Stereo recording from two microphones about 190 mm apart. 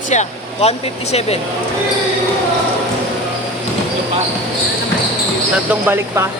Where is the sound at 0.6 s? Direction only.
35° left (ahead or behind).